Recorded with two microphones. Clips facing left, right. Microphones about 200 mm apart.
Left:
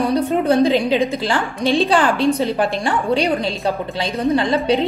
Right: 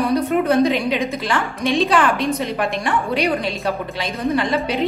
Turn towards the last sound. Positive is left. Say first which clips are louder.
# left 3 dB
turn(degrees=30)  # may be behind; listen again after turning